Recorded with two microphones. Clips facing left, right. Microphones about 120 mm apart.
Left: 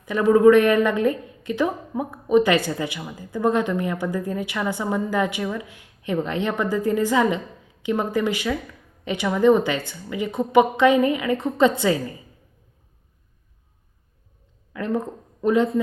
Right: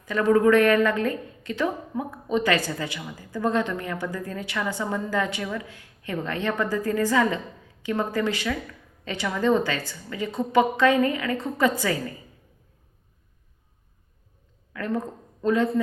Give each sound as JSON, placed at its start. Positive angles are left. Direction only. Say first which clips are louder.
{"t": 0.1, "sound": "a woman's voice", "louder": "left 4 dB", "side_deg": 15}
{"t": 14.7, "sound": "speech", "louder": "left 3 dB", "side_deg": 20}